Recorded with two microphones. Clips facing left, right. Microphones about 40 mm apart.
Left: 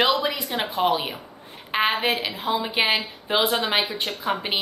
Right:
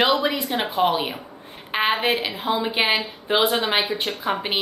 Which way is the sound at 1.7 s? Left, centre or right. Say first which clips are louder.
Right 1 dB; centre.